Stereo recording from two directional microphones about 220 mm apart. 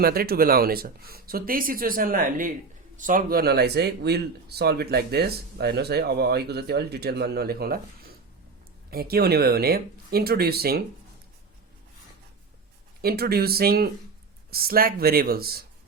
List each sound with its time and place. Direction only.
0.0 s speech: 45° right (ahead or behind)
13.0 s speech: 45° right (ahead or behind)